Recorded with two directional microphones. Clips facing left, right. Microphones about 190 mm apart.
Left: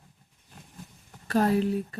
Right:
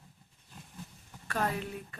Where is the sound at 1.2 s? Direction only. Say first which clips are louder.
Left 10 dB; 35° left (ahead or behind).